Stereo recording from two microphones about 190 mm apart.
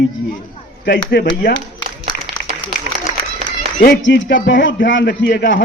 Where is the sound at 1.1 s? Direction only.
65° left (ahead or behind).